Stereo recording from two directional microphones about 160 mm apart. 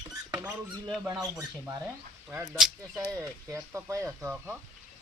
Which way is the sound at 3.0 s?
20° right (ahead or behind).